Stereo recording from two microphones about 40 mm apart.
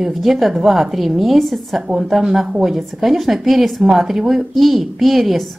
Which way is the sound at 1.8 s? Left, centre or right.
Centre.